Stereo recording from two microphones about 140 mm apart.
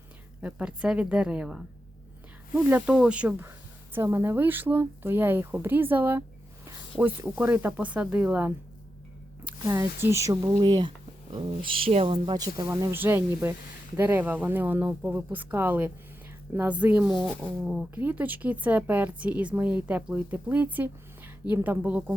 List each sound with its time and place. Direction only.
0.4 s speech: 5° right (ahead or behind)
9.6 s speech: 15° right (ahead or behind); by 12.2 s 45° right (ahead or behind)
12.2 s speech: 30° right (ahead or behind)
12.7 s speech: 15° right (ahead or behind)